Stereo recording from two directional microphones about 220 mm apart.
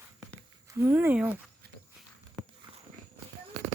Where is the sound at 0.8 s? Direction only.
10° right (ahead or behind).